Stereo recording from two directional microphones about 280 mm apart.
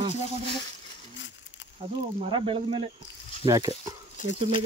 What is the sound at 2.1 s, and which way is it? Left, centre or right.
Speech, centre.